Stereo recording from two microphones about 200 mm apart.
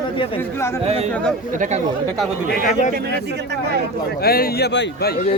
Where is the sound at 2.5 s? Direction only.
45° left (ahead or behind).